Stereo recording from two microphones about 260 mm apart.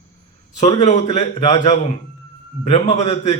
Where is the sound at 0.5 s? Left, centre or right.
Left.